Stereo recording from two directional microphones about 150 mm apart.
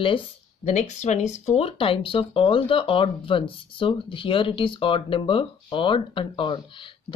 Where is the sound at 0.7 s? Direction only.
50° left (ahead or behind).